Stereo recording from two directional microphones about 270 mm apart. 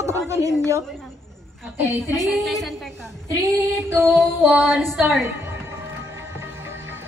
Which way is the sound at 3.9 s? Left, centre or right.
Centre.